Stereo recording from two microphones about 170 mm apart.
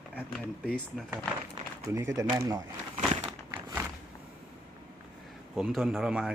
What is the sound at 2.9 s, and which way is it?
Crushing, 40° right (ahead or behind).